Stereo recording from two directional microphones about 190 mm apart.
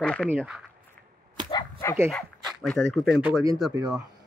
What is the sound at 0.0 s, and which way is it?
Speech, 5° left (ahead or behind).